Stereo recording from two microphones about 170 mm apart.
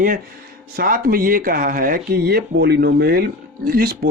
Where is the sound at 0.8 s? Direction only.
55° right (ahead or behind).